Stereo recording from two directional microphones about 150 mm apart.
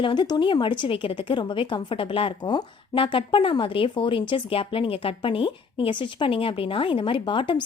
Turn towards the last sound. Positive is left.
turn(degrees=35)  # may be behind; listen again after turning